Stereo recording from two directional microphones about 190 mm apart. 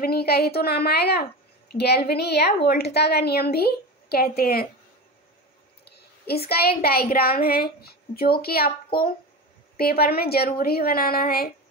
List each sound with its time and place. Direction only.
0.0 s a woman's voice: 55° left (ahead or behind)
5.9 s a sound: 55° left (ahead or behind)
6.5 s a woman's voice: 55° left (ahead or behind)